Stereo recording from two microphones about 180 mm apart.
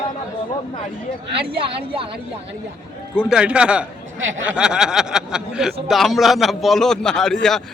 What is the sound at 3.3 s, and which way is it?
Speech, 5° right (ahead or behind).